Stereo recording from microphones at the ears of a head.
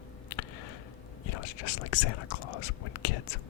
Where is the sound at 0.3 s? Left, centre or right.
Left.